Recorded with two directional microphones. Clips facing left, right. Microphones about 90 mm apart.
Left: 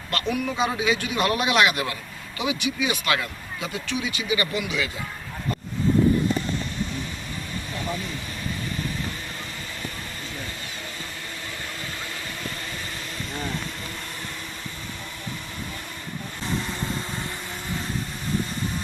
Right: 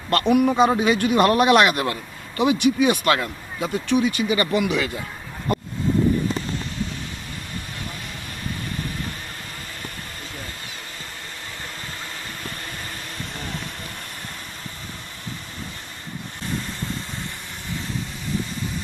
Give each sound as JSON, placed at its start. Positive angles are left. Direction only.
{"t": 0.1, "sound": "speech", "side_deg": -50}
{"t": 5.5, "sound": "vehicle", "side_deg": -65}